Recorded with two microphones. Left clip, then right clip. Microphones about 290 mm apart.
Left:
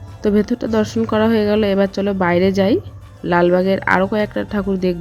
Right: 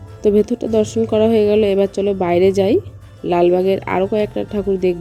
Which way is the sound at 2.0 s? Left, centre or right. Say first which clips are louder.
Right 2 dB; left.